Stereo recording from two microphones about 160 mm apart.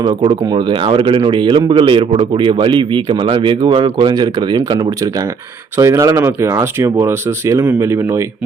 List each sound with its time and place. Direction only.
0.0 s speech: 35° right (ahead or behind); by 8.2 s 20° right (ahead or behind)